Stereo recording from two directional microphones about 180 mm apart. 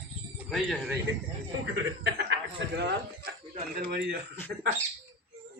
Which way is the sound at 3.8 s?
60° right (ahead or behind).